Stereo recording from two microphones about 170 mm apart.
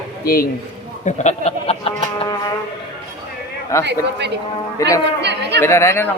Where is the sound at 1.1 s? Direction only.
40° left (ahead or behind).